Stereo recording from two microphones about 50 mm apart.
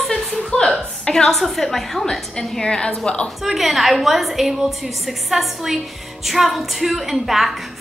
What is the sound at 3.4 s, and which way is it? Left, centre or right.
A woman's voice, centre.